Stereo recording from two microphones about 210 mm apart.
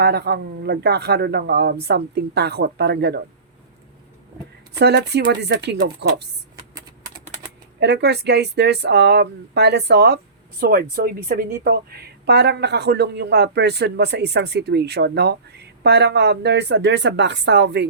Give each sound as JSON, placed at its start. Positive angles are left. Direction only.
{"t": 0.0, "sound": "a woman's voice", "side_deg": -50}
{"t": 4.8, "sound": "a woman's voice", "side_deg": -55}
{"t": 7.8, "sound": "a woman's voice", "side_deg": -55}